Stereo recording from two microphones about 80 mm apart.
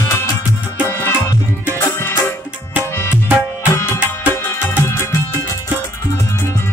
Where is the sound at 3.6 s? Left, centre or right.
Left.